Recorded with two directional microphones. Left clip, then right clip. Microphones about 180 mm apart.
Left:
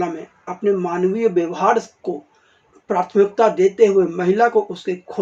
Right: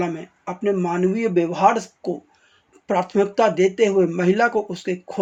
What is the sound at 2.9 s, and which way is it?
Speech, 35° right (ahead or behind).